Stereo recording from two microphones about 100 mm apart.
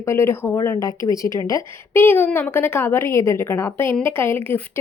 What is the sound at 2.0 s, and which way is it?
A woman's voice, 20° left (ahead or behind).